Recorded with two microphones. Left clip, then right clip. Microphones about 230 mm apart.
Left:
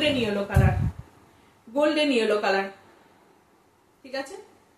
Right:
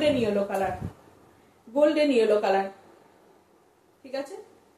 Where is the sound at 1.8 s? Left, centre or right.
Centre.